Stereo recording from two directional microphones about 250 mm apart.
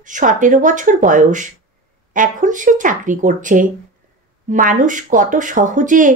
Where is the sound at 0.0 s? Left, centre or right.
Right.